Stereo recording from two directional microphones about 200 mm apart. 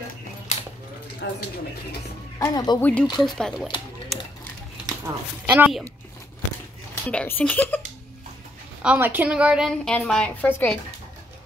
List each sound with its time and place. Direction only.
0.5 s coin: 35° left (ahead or behind)
1.2 s speech: 60° left (ahead or behind)
2.3 s speech: 20° left (ahead or behind)
2.8 s a woman's voice: 5° left (ahead or behind)
4.1 s a sound: centre (ahead or behind)
4.8 s speech: 10° right (ahead or behind)
7.1 s speech: 5° left (ahead or behind)
8.8 s a woman's voice: 10° right (ahead or behind); by 10.8 s 5° left (ahead or behind)